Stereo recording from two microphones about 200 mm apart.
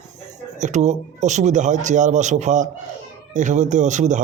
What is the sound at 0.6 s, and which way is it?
Speech, 35° right (ahead or behind).